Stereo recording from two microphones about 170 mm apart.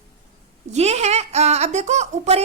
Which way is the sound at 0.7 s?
40° right (ahead or behind).